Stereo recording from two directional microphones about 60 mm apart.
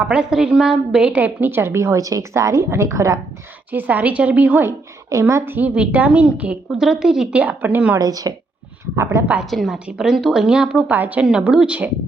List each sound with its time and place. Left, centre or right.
0.0 s a woman's voice: centre
1.2 s a woman's voice: right
3.7 s a woman's voice: right
5.0 s a woman's voice: right
5.5 s a woman's voice: right
6.7 s a woman's voice: centre
7.3 s a woman's voice: right
7.9 s a woman's voice: right
9.0 s a woman's voice: right
9.5 s a woman's voice: centre
9.7 s a woman's voice: centre
10.8 s a woman's voice: right